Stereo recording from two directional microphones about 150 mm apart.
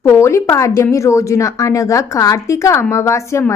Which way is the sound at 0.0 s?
15° left (ahead or behind).